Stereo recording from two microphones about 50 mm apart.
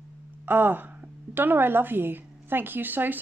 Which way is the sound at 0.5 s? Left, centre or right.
Right.